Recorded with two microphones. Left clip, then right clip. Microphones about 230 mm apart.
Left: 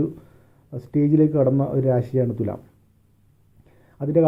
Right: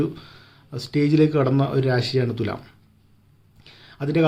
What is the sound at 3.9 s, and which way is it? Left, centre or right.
Speech, centre.